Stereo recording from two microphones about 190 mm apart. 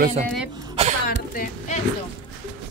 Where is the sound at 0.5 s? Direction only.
20° right (ahead or behind).